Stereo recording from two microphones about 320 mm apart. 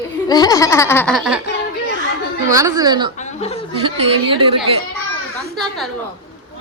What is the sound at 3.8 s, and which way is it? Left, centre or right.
Speech, centre.